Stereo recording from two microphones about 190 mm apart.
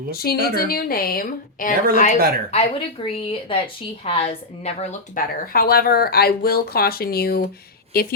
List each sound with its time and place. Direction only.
0.1 s a woman's voice: 55° left (ahead or behind)
2.1 s speech: 50° right (ahead or behind)
2.5 s a woman's voice: 30° left (ahead or behind); by 8.1 s 50° left (ahead or behind)